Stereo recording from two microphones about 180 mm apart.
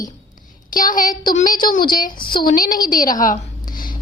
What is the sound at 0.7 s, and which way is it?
Speech, 50° left (ahead or behind).